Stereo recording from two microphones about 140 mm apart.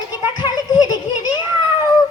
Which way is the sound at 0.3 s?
30° left (ahead or behind).